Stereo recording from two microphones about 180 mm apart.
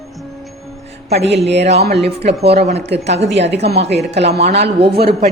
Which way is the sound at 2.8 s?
70° right (ahead or behind).